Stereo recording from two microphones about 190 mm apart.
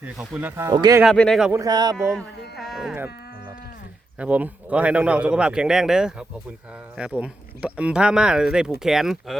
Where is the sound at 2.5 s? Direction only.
Centre (ahead or behind).